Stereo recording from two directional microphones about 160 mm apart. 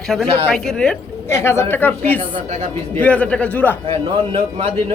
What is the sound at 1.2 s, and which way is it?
Speech, 15° left (ahead or behind).